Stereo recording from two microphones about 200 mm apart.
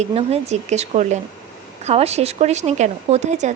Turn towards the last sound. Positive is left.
turn(degrees=-35)  # may be behind; listen again after turning